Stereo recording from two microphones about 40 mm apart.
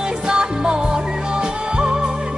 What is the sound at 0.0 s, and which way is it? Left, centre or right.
Music, right.